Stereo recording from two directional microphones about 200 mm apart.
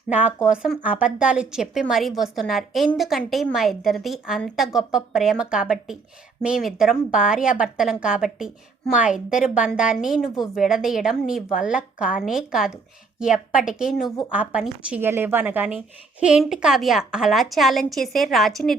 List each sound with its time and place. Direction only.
0.4 s a woman's voice: 5° right (ahead or behind)